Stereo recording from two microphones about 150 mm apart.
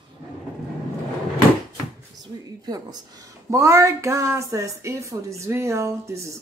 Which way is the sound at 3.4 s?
20° right (ahead or behind).